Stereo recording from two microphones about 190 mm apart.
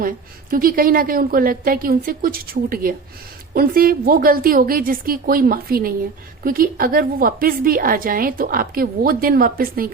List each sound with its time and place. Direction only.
0.5 s a woman's voice: 50° right (ahead or behind)